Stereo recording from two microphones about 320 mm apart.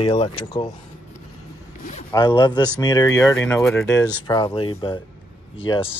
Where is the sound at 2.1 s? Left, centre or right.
Centre.